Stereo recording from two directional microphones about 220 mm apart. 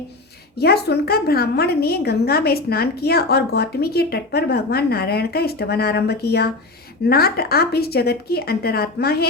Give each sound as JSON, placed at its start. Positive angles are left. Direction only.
{"t": 0.6, "sound": "a woman's voice", "side_deg": 45}